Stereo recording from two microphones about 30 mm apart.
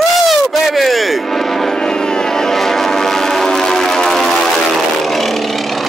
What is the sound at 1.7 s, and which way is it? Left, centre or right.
Vehicle, left.